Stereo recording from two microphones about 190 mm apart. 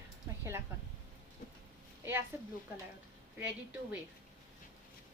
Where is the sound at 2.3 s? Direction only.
10° right (ahead or behind).